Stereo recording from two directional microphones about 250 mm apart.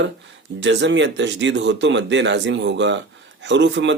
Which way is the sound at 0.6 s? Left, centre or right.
Right.